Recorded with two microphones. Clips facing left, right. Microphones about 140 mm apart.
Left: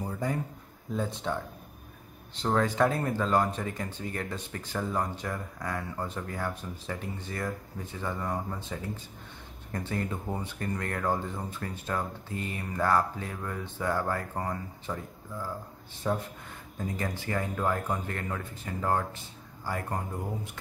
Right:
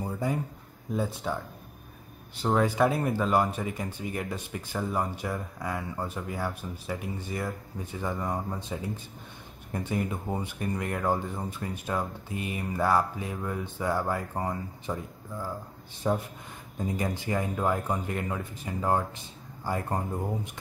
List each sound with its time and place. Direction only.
0.0 s a sound: 10° right (ahead or behind)
0.9 s speech: 5° right (ahead or behind)
16.0 s speech: 15° right (ahead or behind)